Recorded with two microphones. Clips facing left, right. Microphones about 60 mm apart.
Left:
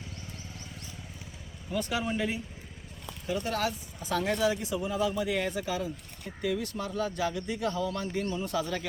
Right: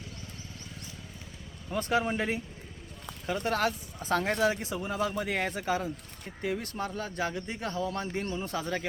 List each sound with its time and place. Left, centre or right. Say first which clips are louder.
1.7 s speech: right 2 dB; right